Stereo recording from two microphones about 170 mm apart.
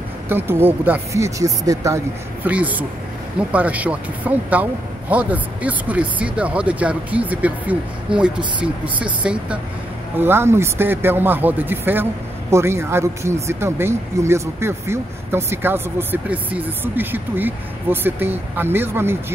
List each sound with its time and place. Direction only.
0.3 s speech: 15° right (ahead or behind)
2.4 s speech: 10° right (ahead or behind)